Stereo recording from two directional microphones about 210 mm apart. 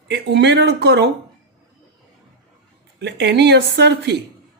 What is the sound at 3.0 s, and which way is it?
Speech, 55° right (ahead or behind).